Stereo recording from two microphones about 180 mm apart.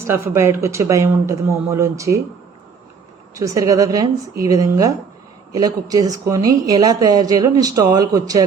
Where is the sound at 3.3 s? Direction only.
20° right (ahead or behind).